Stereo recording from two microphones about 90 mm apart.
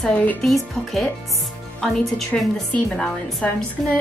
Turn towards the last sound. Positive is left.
turn(degrees=0)  # may be behind; listen again after turning